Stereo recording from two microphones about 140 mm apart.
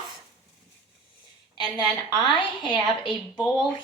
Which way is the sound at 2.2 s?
35° left (ahead or behind).